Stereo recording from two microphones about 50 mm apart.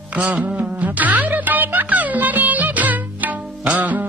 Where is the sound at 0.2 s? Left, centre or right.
Right.